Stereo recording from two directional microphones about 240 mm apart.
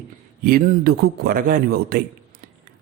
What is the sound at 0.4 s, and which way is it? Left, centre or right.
A man's voice, right.